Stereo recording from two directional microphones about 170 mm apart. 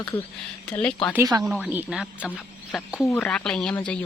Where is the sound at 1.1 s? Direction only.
20° right (ahead or behind).